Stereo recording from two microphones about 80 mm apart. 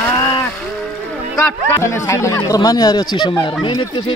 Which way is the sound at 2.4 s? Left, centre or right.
Left.